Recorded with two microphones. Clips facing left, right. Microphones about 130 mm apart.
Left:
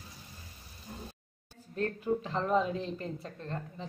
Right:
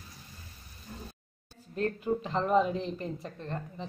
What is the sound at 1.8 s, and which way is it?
Speech, 15° right (ahead or behind).